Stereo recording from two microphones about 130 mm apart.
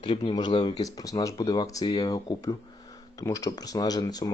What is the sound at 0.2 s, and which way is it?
Speech, 35° left (ahead or behind).